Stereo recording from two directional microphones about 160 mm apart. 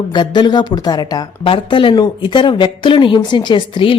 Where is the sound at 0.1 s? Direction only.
30° left (ahead or behind).